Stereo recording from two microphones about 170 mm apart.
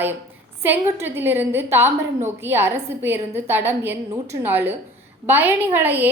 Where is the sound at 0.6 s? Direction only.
10° right (ahead or behind).